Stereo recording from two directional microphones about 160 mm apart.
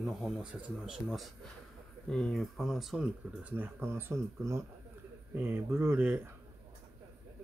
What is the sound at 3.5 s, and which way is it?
Speech, 15° right (ahead or behind).